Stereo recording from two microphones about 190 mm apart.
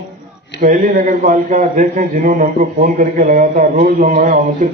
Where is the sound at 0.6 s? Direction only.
45° right (ahead or behind).